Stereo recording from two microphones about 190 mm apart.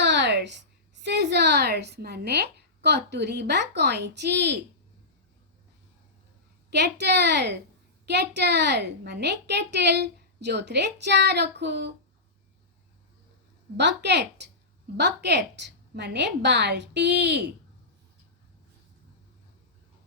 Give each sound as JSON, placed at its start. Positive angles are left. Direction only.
{"t": 0.0, "sound": "a sound", "side_deg": -65}
{"t": 1.0, "sound": "speech", "side_deg": -65}
{"t": 6.7, "sound": "a woman's voice", "side_deg": -60}
{"t": 13.7, "sound": "a woman's voice", "side_deg": -65}